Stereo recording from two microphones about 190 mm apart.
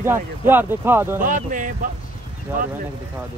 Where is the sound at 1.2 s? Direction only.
45° right (ahead or behind).